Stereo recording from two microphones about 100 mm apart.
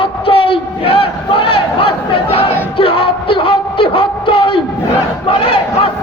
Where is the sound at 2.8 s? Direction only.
70° left (ahead or behind).